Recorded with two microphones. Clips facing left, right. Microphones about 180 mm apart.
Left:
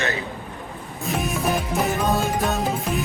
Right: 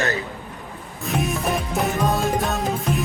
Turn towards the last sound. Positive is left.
turn(degrees=0)  # may be behind; listen again after turning